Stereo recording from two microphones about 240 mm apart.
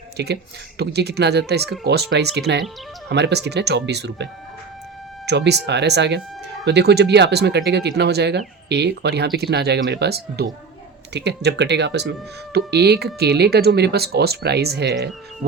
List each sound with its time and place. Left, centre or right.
0.2 s speech: right